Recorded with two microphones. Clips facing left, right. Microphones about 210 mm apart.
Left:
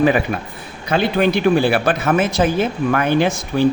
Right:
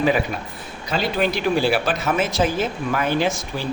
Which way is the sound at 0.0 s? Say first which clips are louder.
Left 4 dB; 55° left (ahead or behind).